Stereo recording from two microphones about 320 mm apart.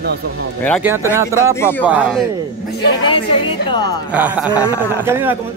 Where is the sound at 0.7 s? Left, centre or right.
Centre.